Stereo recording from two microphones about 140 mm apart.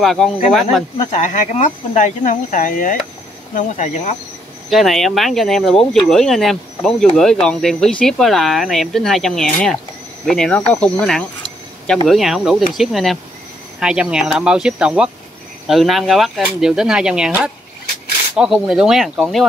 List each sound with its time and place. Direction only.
0.0 s speech: centre (ahead or behind)
1.1 s speech: 60° left (ahead or behind); by 3.0 s 75° left (ahead or behind)
3.5 s speech: 65° left (ahead or behind)
4.6 s speech: centre (ahead or behind)